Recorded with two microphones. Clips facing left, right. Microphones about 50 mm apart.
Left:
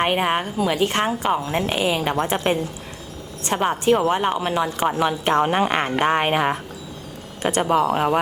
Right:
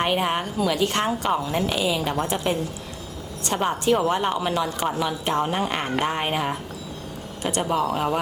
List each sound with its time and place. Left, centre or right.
0.0 s a woman's voice: left
4.9 s speech: left
5.7 s speech: left
6.1 s speech: left